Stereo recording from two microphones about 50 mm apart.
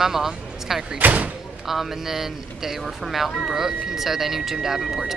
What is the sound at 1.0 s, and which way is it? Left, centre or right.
Speech, right.